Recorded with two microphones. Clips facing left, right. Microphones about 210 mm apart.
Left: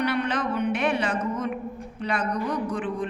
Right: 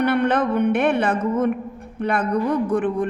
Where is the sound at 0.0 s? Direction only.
55° right (ahead or behind).